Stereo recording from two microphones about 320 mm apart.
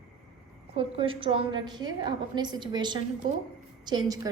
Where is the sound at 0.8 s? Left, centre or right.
Centre.